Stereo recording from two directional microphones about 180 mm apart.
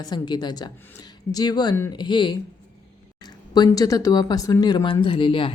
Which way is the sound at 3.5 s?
20° left (ahead or behind).